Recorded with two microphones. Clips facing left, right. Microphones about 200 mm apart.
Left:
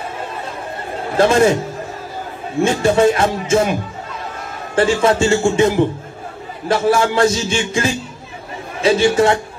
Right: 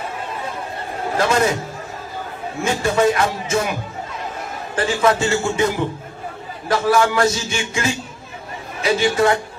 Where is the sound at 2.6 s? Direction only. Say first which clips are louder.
Left 4 dB; 30° left (ahead or behind).